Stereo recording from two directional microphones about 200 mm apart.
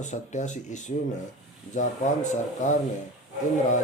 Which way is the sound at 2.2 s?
35° left (ahead or behind).